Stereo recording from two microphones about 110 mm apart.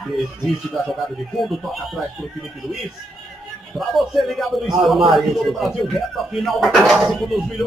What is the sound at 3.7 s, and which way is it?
A man's voice, centre (ahead or behind).